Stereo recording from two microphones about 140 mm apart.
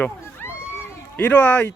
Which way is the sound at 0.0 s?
15° left (ahead or behind).